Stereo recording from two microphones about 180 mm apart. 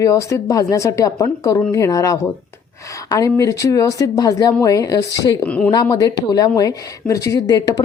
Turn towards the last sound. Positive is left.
turn(degrees=20)  # may be behind; listen again after turning